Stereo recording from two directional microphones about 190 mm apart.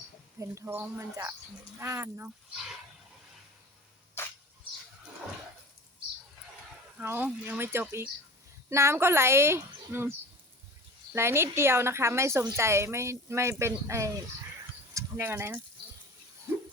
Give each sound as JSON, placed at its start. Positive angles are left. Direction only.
{"t": 0.3, "sound": "a woman's voice", "side_deg": -15}
{"t": 4.2, "sound": "dog", "side_deg": 15}
{"t": 7.0, "sound": "a woman's voice", "side_deg": -10}
{"t": 11.1, "sound": "a woman's voice", "side_deg": -15}